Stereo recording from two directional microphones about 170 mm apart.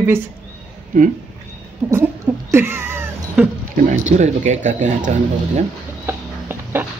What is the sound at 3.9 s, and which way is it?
Speech, 45° right (ahead or behind).